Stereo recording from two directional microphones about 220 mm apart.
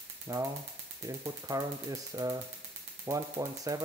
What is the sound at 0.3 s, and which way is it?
Speech, 15° right (ahead or behind).